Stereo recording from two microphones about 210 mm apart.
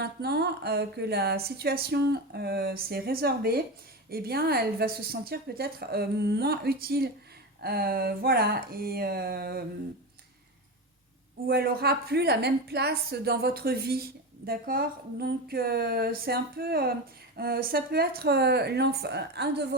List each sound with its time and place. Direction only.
0.0 s a woman's voice: 50° right (ahead or behind)
11.4 s a woman's voice: 45° right (ahead or behind)